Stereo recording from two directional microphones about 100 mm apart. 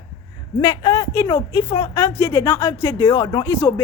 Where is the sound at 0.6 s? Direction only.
35° left (ahead or behind).